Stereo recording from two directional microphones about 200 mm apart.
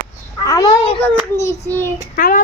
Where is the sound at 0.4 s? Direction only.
20° left (ahead or behind).